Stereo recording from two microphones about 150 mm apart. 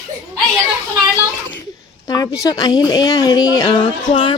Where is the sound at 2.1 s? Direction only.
25° left (ahead or behind).